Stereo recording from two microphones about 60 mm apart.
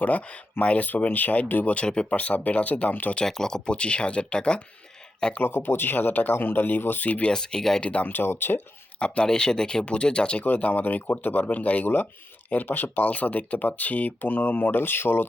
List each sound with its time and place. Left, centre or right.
0.0 s speech: left
3.2 s speech: centre
5.4 s speech: left
7.3 s speech: centre
8.0 s speech: left
9.0 s speech: centre
10.4 s speech: left